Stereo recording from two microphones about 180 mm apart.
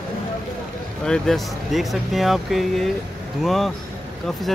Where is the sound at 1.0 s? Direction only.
5° left (ahead or behind).